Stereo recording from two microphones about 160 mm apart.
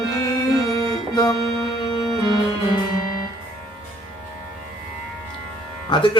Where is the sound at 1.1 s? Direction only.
25° left (ahead or behind).